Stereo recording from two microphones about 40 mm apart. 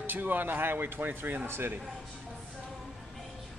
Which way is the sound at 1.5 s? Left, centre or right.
Right.